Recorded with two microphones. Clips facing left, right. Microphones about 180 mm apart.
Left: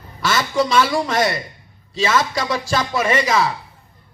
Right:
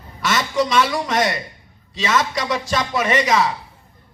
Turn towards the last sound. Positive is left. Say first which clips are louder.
# even
turn(degrees=30)  # may be behind; listen again after turning